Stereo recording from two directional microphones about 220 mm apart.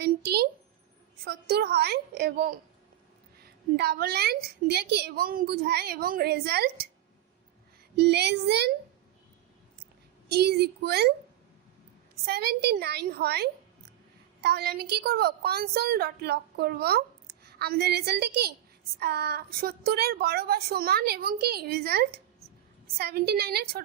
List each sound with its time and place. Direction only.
0.0 s a woman's voice: 50° right (ahead or behind)
3.8 s a woman's voice: 45° right (ahead or behind)
7.9 s a woman's voice: 50° right (ahead or behind)
10.2 s a woman's voice: 45° right (ahead or behind)
12.2 s a woman's voice: 45° right (ahead or behind)